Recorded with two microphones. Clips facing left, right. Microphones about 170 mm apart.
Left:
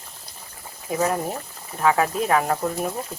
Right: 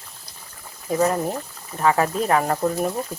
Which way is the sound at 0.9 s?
5° left (ahead or behind).